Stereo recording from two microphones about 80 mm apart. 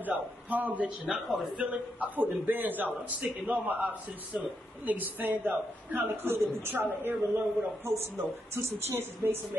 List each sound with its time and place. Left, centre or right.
0.0 s a man's voice: right; by 1.5 s centre
1.6 s a man's voice: centre
4.8 s a woman's voice: right